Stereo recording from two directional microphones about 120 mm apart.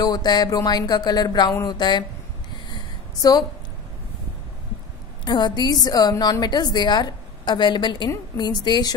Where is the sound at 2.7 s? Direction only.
35° left (ahead or behind).